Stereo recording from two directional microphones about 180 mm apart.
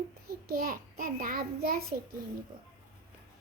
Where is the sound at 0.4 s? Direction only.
55° right (ahead or behind).